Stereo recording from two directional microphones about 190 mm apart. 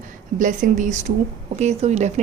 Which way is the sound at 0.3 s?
45° right (ahead or behind).